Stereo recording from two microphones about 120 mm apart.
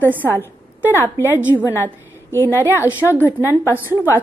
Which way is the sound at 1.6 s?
20° left (ahead or behind).